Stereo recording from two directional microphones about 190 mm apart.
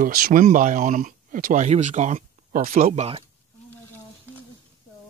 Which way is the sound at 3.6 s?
10° left (ahead or behind).